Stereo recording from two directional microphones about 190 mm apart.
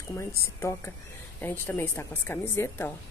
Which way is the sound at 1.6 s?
10° left (ahead or behind).